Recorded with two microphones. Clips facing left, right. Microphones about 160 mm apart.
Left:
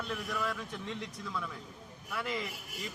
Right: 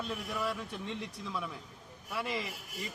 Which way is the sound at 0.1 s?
20° right (ahead or behind).